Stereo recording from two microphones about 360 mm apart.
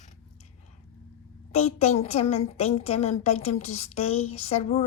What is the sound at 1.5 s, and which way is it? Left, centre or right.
A woman's voice, centre.